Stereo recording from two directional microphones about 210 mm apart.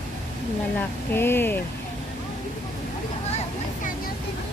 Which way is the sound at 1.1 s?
10° left (ahead or behind).